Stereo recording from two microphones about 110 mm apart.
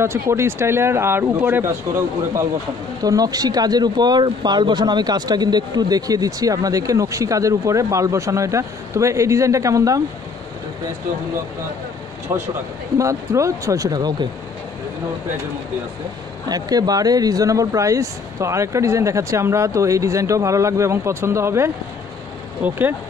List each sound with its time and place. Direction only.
0.0 s speech: 25° right (ahead or behind)
3.0 s speech: 35° right (ahead or behind)
12.3 s speech: 25° right (ahead or behind)
16.4 s speech: 35° right (ahead or behind); by 22.9 s 20° right (ahead or behind)